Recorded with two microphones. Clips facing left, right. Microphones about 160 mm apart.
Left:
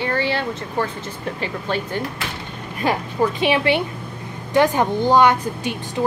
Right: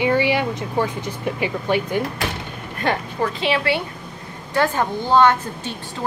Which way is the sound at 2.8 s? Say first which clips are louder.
Left 2 dB; 15° left (ahead or behind).